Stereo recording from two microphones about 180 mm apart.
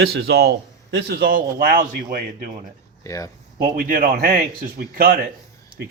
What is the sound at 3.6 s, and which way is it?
A man's voice, 50° right (ahead or behind).